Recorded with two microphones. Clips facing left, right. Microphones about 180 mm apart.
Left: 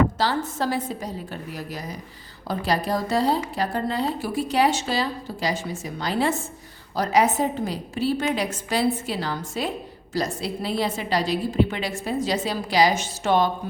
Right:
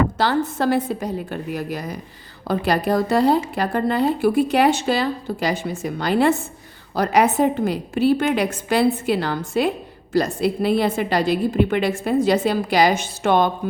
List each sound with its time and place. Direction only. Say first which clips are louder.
0.2 s a woman's voice: right 4 dB; 60° right (ahead or behind)